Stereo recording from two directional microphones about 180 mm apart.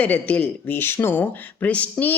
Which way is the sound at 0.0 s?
10° left (ahead or behind).